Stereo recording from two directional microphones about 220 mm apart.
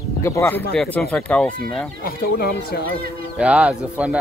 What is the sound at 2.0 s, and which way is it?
Speech, 45° left (ahead or behind).